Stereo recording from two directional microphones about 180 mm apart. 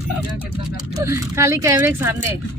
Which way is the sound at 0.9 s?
15° right (ahead or behind).